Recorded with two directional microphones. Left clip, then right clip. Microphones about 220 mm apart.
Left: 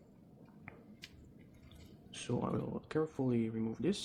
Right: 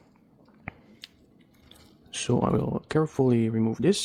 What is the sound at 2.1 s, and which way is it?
Speech, 55° right (ahead or behind).